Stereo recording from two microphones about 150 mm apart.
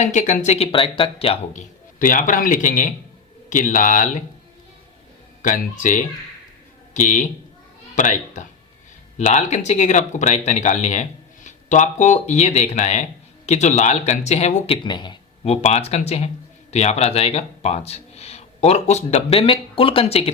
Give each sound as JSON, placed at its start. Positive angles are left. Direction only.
{"t": 0.0, "sound": "speech", "side_deg": 55}
{"t": 2.0, "sound": "speech", "side_deg": 60}
{"t": 5.4, "sound": "speech", "side_deg": 55}
{"t": 14.8, "sound": "speech", "side_deg": 30}
{"t": 15.4, "sound": "speech", "side_deg": 45}